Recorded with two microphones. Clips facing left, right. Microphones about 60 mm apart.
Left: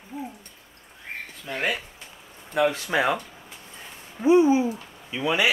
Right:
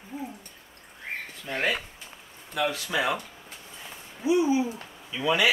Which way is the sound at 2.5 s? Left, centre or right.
Left.